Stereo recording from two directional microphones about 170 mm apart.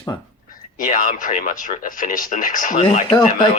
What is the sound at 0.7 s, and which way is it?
Speech, 50° left (ahead or behind).